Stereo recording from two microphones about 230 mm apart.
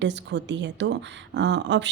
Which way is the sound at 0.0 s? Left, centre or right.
Right.